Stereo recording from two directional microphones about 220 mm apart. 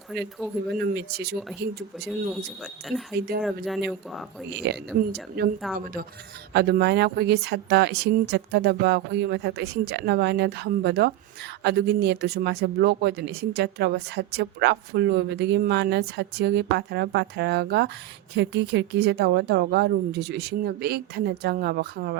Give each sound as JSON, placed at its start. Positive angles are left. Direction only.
{"t": 0.8, "sound": "speech", "side_deg": -45}
{"t": 3.2, "sound": "speech", "side_deg": -45}
{"t": 3.4, "sound": "speech", "side_deg": 0}
{"t": 5.6, "sound": "speech", "side_deg": 0}
{"t": 6.5, "sound": "speech", "side_deg": -45}